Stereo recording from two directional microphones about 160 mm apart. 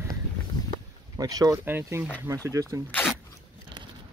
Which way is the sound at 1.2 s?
20° right (ahead or behind).